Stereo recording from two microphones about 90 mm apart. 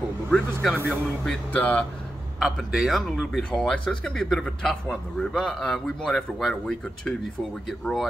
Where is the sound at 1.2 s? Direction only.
5° left (ahead or behind).